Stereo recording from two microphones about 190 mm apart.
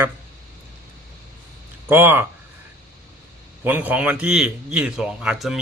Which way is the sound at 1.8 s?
10° right (ahead or behind).